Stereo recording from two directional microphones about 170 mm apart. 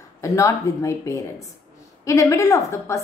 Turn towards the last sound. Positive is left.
turn(degrees=15)  # may be behind; listen again after turning